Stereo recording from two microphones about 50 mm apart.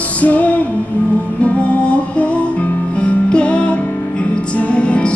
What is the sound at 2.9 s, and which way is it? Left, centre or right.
Music, left.